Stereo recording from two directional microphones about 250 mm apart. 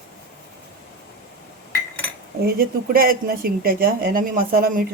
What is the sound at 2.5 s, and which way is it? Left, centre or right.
Speech, right.